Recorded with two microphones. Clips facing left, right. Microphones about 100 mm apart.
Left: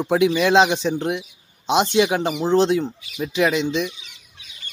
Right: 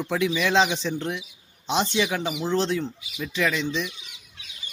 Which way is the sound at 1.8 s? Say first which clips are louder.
Left 6 dB; 60° left (ahead or behind).